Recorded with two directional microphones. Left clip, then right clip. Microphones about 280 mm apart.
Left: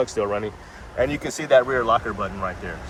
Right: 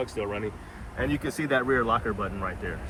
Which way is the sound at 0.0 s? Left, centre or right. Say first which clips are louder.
Left 8 dB; left.